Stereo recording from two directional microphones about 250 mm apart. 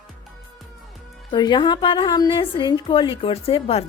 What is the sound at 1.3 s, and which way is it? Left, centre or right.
Music, centre.